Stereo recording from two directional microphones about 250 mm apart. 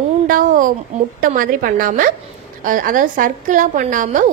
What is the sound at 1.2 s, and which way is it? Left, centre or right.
A woman's voice, right.